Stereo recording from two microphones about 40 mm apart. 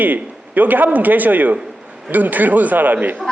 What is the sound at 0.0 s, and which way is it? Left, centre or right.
Speech, right.